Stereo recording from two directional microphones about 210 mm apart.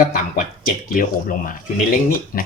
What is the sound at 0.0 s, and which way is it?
Speech, 40° left (ahead or behind).